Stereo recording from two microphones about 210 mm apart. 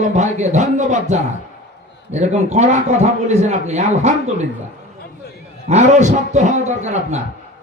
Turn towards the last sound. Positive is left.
turn(degrees=-35)  # may be behind; listen again after turning